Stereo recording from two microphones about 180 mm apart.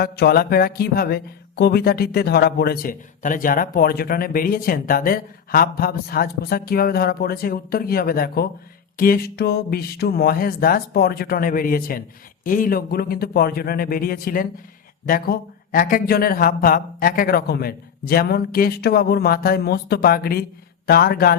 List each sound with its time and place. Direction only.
0.0 s speech: 60° left (ahead or behind)